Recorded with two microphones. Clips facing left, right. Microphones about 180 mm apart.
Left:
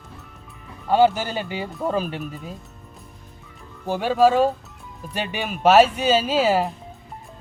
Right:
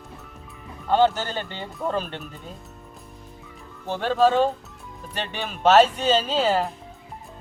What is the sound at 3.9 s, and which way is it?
Speech, 10° left (ahead or behind).